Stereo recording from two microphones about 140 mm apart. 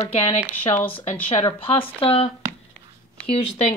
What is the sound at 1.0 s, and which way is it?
Speech, 50° left (ahead or behind).